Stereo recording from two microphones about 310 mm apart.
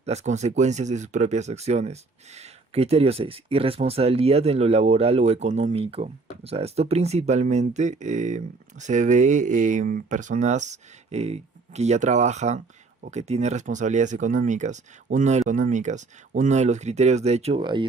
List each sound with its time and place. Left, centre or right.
0.0 s speech: right